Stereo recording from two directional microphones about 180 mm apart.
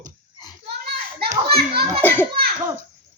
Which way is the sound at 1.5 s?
60° right (ahead or behind).